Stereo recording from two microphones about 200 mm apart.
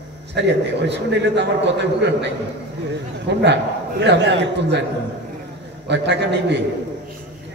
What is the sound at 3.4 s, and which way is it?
A man's voice, 60° right (ahead or behind).